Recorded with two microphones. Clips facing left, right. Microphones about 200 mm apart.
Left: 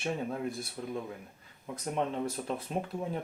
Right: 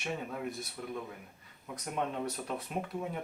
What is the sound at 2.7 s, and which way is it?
Speech, 30° left (ahead or behind).